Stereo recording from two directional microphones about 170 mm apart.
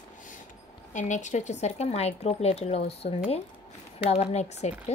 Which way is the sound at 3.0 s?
45° left (ahead or behind).